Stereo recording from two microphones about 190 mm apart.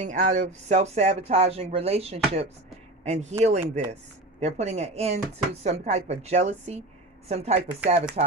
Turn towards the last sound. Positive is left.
turn(degrees=-35)  # may be behind; listen again after turning